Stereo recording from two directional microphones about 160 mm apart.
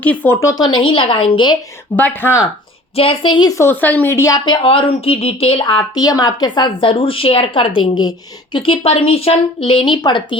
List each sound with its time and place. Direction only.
0.0 s a woman's voice: 10° left (ahead or behind); by 1.5 s 30° left (ahead or behind)
2.0 s speech: 10° left (ahead or behind)
2.9 s a woman's voice: 35° left (ahead or behind); by 4.5 s 20° left (ahead or behind)
4.6 s speech: 35° left (ahead or behind)